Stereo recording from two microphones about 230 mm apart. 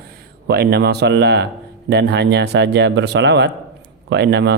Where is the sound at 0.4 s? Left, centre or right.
Right.